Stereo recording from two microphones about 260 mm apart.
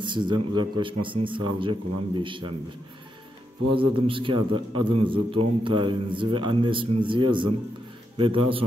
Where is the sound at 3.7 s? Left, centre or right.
Centre.